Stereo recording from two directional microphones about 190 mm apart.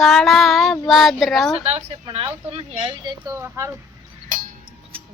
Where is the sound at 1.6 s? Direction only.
30° right (ahead or behind); by 3.8 s 15° right (ahead or behind).